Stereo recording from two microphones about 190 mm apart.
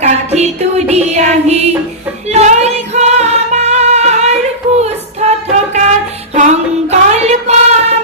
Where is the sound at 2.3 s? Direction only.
35° right (ahead or behind).